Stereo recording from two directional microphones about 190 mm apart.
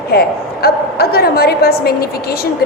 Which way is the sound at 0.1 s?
55° left (ahead or behind).